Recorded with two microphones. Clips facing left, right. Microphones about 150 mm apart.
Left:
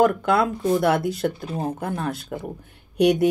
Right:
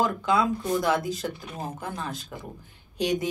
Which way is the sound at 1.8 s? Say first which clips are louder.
Left 7 dB; 65° left (ahead or behind).